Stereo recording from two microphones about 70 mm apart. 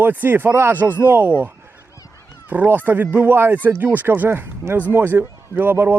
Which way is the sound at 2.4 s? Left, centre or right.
Right.